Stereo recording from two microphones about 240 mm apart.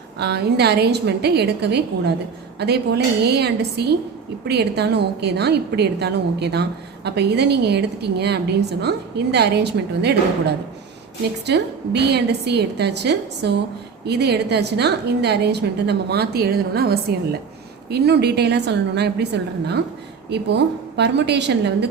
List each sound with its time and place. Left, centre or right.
0.2 s a woman's voice: right
11.4 s a woman's voice: right